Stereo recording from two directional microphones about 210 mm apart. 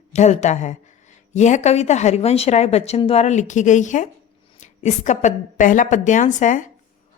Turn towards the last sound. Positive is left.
turn(degrees=35)  # may be behind; listen again after turning